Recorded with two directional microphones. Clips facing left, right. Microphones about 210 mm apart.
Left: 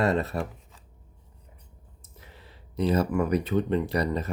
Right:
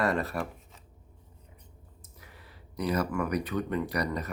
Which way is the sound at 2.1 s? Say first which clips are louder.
Left 3 dB; 25° left (ahead or behind).